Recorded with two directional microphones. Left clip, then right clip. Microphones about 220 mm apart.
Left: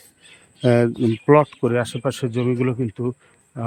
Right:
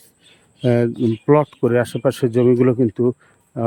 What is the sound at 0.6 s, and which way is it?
Speech, 5° right (ahead or behind).